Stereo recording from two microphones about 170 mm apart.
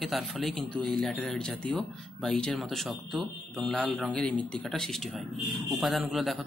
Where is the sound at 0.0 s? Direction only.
Centre (ahead or behind).